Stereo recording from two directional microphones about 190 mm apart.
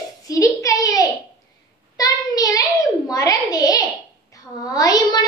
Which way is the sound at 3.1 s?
20° left (ahead or behind).